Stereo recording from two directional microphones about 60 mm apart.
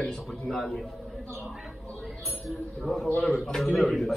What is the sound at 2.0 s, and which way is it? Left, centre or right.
A man's voice, centre.